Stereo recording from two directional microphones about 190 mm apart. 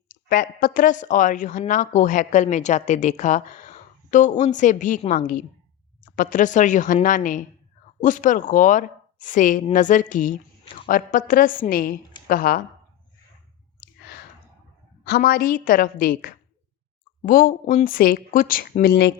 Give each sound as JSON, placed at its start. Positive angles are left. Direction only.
{"t": 0.3, "sound": "a woman's voice", "side_deg": 45}
{"t": 15.0, "sound": "a woman's voice", "side_deg": 55}